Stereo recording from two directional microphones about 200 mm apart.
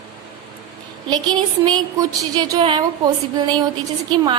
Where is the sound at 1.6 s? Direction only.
20° right (ahead or behind).